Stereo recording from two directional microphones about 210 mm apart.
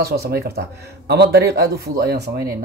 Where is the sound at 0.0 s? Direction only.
45° right (ahead or behind).